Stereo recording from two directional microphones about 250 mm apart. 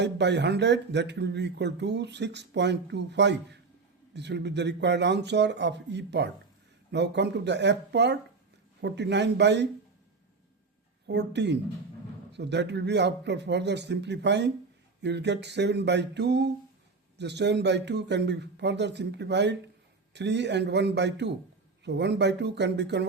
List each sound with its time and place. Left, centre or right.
0.0 s speech: right
11.0 s speech: right